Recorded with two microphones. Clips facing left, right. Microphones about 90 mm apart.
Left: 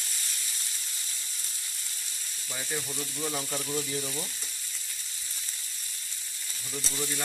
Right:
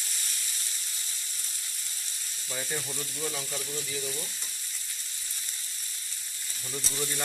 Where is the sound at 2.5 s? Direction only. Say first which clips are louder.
Even; centre (ahead or behind).